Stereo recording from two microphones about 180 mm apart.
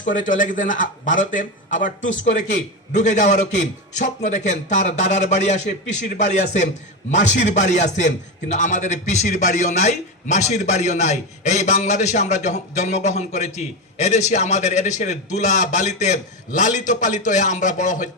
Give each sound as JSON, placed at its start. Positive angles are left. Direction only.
{"t": 0.0, "sound": "a man's voice", "side_deg": 45}